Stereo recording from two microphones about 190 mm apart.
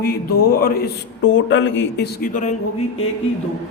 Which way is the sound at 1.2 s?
75° left (ahead or behind).